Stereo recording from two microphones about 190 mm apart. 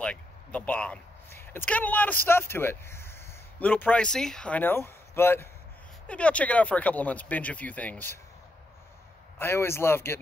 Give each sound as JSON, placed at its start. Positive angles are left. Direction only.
{"t": 0.0, "sound": "speech", "side_deg": 5}
{"t": 9.4, "sound": "speech", "side_deg": 15}